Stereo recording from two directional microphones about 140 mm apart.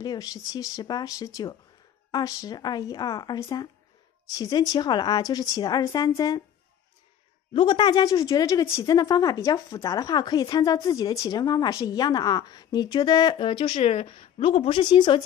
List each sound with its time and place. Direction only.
0.0 s speech: 30° left (ahead or behind)
7.5 s speech: 35° left (ahead or behind)